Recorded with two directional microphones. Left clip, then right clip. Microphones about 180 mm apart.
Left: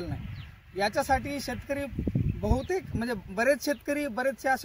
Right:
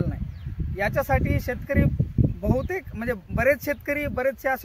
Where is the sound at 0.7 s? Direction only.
15° right (ahead or behind).